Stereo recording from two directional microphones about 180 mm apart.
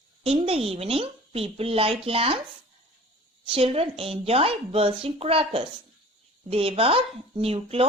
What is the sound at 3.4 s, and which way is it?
Speech, 30° right (ahead or behind).